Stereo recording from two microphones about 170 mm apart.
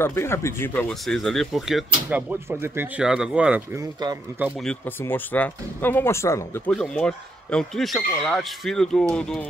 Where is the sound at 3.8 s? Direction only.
25° right (ahead or behind).